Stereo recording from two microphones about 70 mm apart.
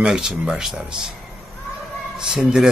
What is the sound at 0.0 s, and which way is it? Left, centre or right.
A man's voice, centre.